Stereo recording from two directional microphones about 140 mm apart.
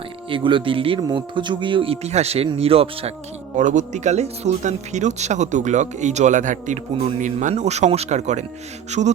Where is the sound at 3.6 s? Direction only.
60° right (ahead or behind).